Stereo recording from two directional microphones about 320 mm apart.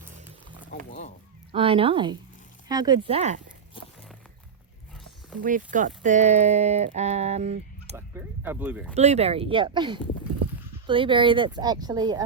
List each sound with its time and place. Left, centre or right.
1.5 s speech: centre
3.8 s walk: centre
5.4 s speech: right
7.9 s speech: centre
9.0 s speech: centre